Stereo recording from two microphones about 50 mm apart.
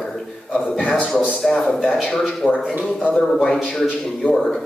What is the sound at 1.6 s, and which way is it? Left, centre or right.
Speech, centre.